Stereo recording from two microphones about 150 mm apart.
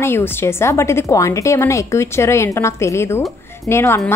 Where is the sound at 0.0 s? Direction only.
15° left (ahead or behind).